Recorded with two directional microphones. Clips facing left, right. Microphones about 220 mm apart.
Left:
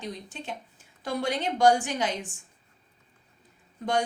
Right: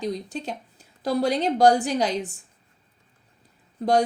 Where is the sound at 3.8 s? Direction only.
35° right (ahead or behind).